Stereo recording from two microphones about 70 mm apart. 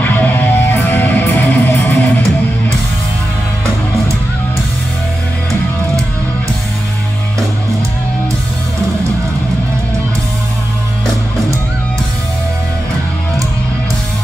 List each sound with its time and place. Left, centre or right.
0.0 s music: left